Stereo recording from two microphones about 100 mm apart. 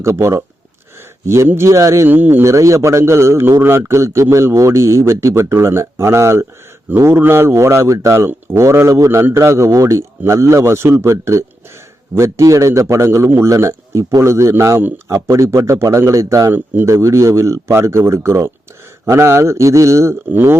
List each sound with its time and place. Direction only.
0.0 s a man's voice: 25° right (ahead or behind)
2.0 s a man's voice: 20° right (ahead or behind)